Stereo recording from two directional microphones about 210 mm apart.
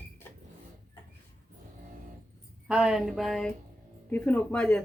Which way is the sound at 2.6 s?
5° right (ahead or behind).